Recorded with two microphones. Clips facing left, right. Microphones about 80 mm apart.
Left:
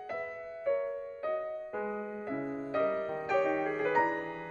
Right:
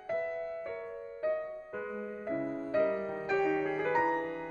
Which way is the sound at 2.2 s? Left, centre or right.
Centre.